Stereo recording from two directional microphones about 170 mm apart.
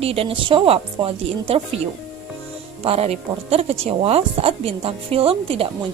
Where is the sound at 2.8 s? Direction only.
35° right (ahead or behind).